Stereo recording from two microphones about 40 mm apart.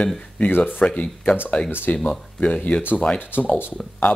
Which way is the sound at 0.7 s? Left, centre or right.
Left.